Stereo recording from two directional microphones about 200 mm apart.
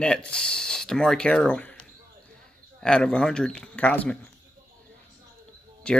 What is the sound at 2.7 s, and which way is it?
Speech, 5° left (ahead or behind).